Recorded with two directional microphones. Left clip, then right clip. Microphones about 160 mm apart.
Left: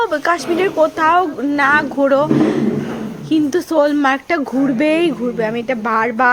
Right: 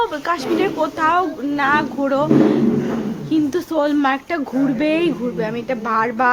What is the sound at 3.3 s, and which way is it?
Speech, 25° left (ahead or behind).